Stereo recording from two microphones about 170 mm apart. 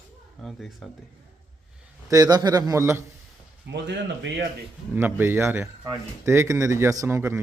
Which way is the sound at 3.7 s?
85° right.